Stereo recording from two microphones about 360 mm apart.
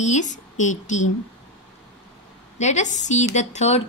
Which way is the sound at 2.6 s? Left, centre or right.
Centre.